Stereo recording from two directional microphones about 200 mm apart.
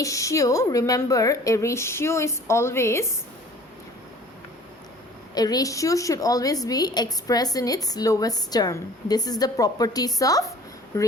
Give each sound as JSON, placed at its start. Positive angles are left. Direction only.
{"t": 0.0, "sound": "a woman's voice", "side_deg": 15}
{"t": 5.3, "sound": "a woman's voice", "side_deg": 20}